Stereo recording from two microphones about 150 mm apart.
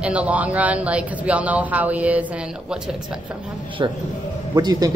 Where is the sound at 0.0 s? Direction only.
10° right (ahead or behind).